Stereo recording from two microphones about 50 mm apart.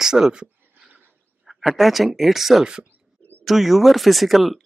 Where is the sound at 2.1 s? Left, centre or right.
Centre.